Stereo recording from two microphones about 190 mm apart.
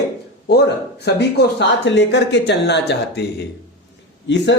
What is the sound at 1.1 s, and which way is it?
Speech, 60° left (ahead or behind).